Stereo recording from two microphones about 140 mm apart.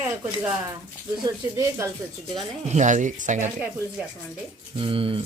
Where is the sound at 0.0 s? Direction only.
10° right (ahead or behind).